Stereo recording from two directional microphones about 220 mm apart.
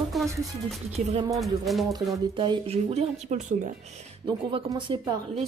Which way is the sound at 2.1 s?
20° right (ahead or behind).